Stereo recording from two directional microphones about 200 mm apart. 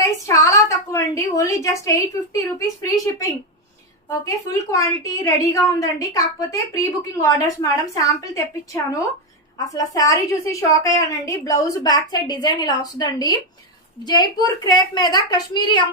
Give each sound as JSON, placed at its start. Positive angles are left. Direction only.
{"t": 0.0, "sound": "a woman's voice", "side_deg": 15}
{"t": 4.4, "sound": "a woman's voice", "side_deg": 15}